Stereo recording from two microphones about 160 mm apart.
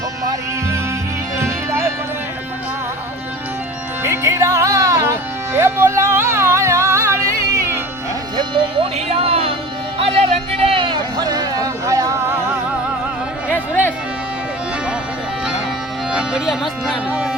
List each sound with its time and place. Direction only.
1.4 s music: 15° right (ahead or behind)
4.0 s music: 15° right (ahead or behind)
8.4 s music: 35° right (ahead or behind)
10.0 s a sound: 35° right (ahead or behind); by 12.2 s 20° right (ahead or behind)
16.1 s speech: 5° right (ahead or behind)